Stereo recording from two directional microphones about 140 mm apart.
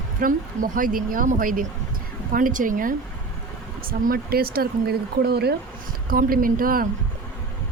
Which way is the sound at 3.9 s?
90° right.